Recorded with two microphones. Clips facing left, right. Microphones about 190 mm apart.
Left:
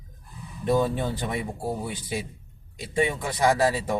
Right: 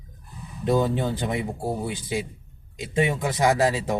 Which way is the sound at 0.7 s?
20° right (ahead or behind).